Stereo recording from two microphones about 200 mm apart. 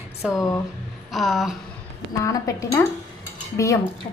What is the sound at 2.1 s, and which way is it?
A woman's voice, 15° left (ahead or behind).